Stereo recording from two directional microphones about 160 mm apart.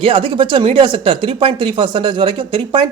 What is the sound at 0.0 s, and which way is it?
Speech, 35° right (ahead or behind).